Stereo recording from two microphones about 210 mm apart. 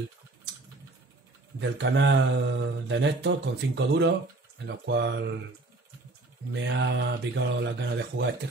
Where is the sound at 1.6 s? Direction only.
60° right (ahead or behind).